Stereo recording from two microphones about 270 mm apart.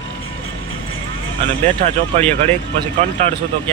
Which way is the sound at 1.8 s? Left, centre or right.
Right.